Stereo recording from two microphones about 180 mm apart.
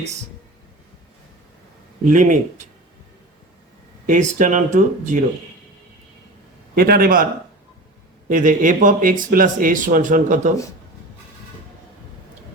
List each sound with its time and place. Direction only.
2.0 s speech: 45° right (ahead or behind)
4.0 s speech: 45° right (ahead or behind)
6.7 s a man's voice: 55° right (ahead or behind)
8.3 s speech: 45° right (ahead or behind)